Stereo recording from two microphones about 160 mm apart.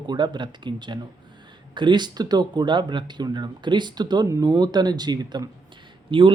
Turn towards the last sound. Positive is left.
turn(degrees=-30)  # may be behind; listen again after turning